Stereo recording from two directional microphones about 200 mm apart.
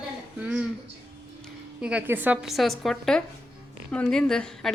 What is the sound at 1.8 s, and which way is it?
A woman's voice, 5° right (ahead or behind).